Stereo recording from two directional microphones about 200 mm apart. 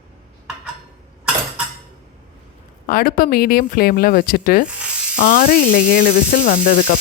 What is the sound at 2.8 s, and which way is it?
Speech, 45° left (ahead or behind).